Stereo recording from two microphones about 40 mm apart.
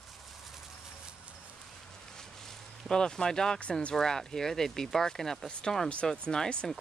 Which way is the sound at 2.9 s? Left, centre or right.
Centre.